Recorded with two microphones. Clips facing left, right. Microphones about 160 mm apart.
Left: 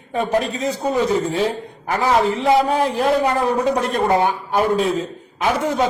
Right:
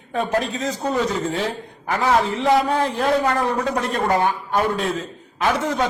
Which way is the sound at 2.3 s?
Centre (ahead or behind).